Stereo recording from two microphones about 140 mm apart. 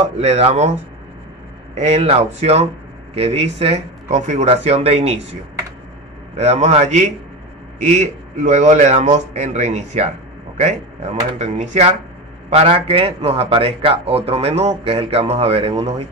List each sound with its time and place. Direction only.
0.2 s a man's voice: 45° right (ahead or behind)
1.8 s a man's voice: 50° right (ahead or behind)
6.3 s a man's voice: 50° right (ahead or behind)